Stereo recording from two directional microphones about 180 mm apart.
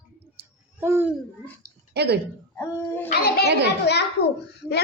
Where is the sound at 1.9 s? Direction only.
65° right (ahead or behind).